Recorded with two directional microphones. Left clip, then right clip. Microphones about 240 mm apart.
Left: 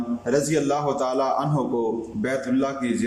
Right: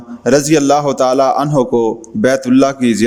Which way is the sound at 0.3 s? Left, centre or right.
Right.